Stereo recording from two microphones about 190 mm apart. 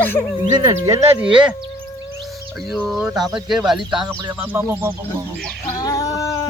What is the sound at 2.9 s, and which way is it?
Speech, 5° right (ahead or behind).